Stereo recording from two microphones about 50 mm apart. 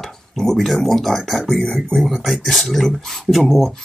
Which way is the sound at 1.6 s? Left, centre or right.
Centre.